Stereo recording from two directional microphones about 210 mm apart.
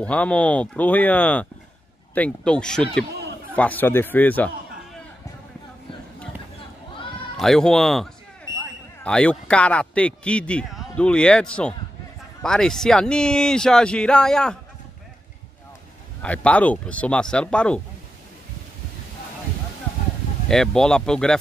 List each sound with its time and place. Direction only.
0.0 s a man's voice: 5° left (ahead or behind)
7.3 s a man's voice: centre (ahead or behind)
16.2 s a man's voice: 5° left (ahead or behind)
20.4 s a man's voice: centre (ahead or behind)